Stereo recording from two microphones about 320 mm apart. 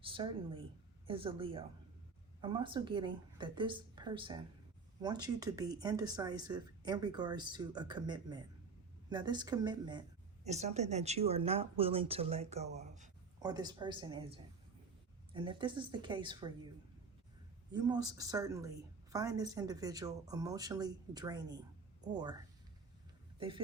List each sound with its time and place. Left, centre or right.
0.0 s speech: centre
23.4 s speech: centre